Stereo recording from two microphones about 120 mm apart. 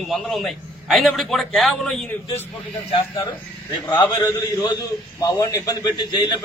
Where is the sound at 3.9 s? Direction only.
35° left (ahead or behind).